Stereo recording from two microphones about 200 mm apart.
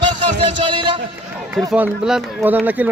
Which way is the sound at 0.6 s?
25° right (ahead or behind).